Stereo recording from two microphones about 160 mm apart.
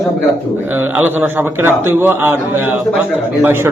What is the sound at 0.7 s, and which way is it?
A man's voice, 10° right (ahead or behind).